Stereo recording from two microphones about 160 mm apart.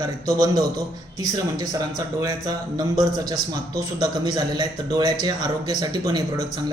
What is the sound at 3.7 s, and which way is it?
Speech, 25° right (ahead or behind).